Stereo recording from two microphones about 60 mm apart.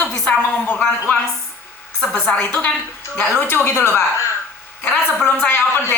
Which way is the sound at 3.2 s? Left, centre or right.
Left.